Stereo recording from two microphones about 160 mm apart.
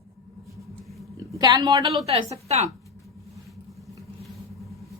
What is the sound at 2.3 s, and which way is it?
Speech, 40° right (ahead or behind).